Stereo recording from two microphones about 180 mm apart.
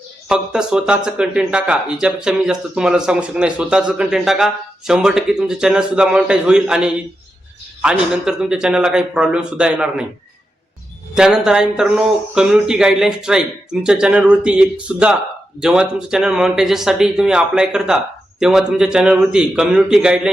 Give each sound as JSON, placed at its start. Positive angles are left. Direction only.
{"t": 0.3, "sound": "speech", "side_deg": -5}
{"t": 11.1, "sound": "speech", "side_deg": -5}